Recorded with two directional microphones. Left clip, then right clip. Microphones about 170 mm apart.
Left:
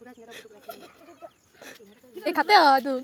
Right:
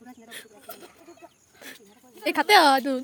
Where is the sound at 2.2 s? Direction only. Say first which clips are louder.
Even; 20° right (ahead or behind).